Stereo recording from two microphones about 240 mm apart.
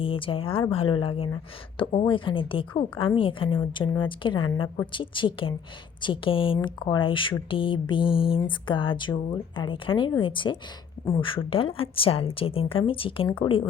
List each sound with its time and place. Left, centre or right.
0.0 s speech: left